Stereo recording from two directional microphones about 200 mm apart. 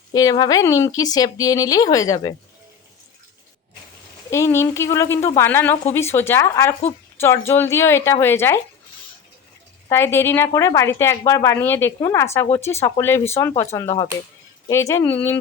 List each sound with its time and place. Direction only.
0.1 s speech: 20° left (ahead or behind)
4.3 s speech: 15° left (ahead or behind)
9.9 s speech: 10° left (ahead or behind)
13.8 s speech: 30° left (ahead or behind)
14.7 s speech: 15° left (ahead or behind)